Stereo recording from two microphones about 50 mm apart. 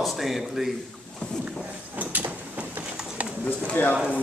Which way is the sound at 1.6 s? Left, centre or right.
Right.